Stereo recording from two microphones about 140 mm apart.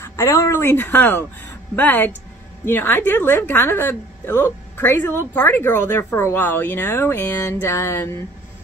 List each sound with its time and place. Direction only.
0.0 s a woman's voice: 20° left (ahead or behind)